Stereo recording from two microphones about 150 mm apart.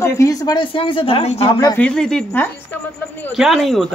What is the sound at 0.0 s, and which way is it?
Speech, 20° left (ahead or behind).